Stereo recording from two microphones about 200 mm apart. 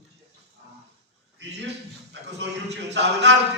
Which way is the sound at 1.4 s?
60° right (ahead or behind).